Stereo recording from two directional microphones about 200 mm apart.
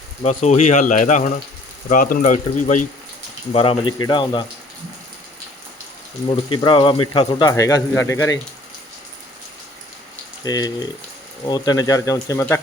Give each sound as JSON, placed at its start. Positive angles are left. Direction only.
{"t": 0.2, "sound": "speech", "side_deg": 35}
{"t": 3.5, "sound": "speech", "side_deg": 30}
{"t": 6.2, "sound": "speech", "side_deg": 25}
{"t": 10.4, "sound": "speech", "side_deg": 20}